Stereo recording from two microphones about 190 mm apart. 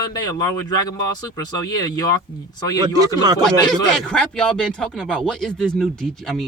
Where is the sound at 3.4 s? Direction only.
Centre (ahead or behind).